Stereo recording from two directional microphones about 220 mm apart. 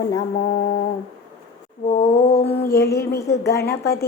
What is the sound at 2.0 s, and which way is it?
Music, 30° left (ahead or behind).